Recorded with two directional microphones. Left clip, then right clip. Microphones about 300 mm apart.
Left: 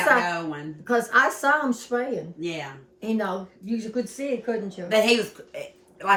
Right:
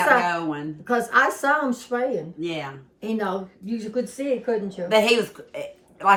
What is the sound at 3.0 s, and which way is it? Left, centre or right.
Speech, centre.